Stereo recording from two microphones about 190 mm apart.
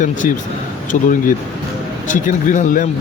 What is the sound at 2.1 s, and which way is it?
Speech, 45° left (ahead or behind).